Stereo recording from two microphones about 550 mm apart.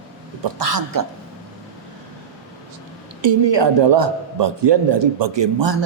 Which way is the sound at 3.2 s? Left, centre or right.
Right.